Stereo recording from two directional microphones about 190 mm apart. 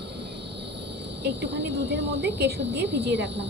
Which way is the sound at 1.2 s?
65° right (ahead or behind).